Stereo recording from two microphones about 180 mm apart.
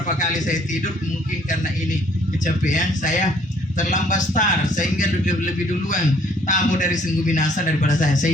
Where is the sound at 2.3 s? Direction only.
45° left (ahead or behind).